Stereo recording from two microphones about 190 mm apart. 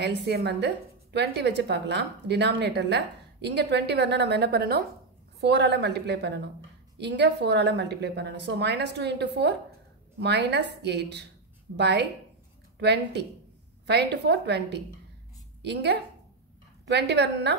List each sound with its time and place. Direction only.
0.0 s a woman's voice: 60° right (ahead or behind)